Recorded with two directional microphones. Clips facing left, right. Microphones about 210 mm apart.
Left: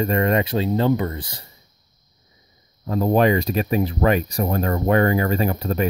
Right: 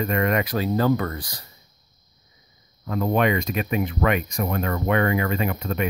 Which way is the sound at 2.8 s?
35° left (ahead or behind).